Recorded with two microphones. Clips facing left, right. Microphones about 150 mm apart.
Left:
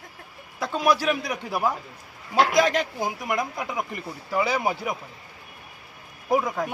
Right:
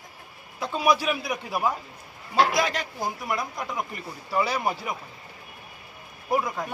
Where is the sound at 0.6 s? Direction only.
10° right (ahead or behind).